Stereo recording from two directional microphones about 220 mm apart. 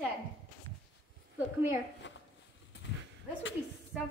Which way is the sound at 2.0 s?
55° left (ahead or behind).